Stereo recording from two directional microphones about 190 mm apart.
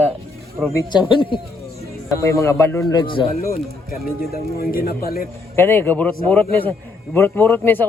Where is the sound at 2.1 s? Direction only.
15° left (ahead or behind).